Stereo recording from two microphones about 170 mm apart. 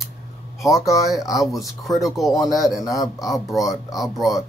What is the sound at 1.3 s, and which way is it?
Speech, centre (ahead or behind).